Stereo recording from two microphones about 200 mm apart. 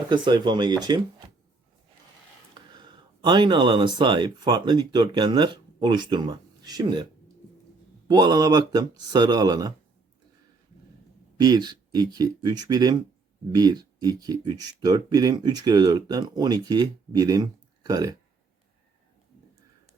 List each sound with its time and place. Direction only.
0.1 s speech: 20° right (ahead or behind)
2.6 s speech: 20° right (ahead or behind)
8.0 s speech: 20° right (ahead or behind)
11.3 s speech: 20° right (ahead or behind)